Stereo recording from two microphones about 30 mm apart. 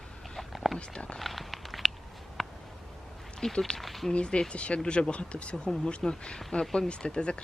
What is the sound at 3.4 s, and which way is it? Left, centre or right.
Speech, left.